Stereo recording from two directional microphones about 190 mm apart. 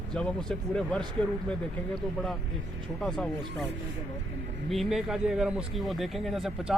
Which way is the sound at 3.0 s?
5° left (ahead or behind).